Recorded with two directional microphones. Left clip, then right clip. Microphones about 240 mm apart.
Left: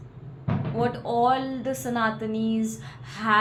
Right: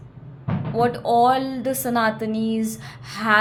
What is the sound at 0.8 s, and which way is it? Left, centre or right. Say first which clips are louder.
A woman's voice: right 6 dB; right.